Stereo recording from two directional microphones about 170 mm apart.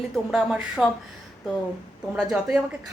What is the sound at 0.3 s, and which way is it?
Speech, 5° right (ahead or behind).